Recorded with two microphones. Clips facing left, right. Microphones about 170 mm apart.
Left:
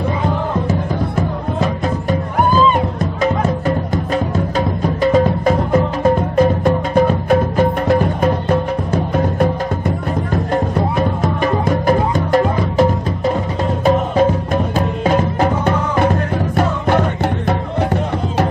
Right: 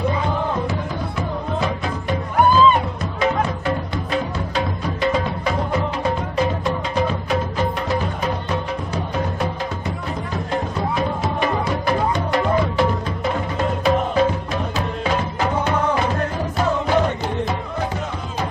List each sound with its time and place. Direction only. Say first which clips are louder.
3.2 s music: left 3 dB; 45° left (ahead or behind); by 17.6 s 60° left (ahead or behind)